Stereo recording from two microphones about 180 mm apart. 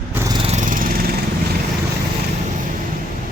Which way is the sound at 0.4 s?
40° right (ahead or behind).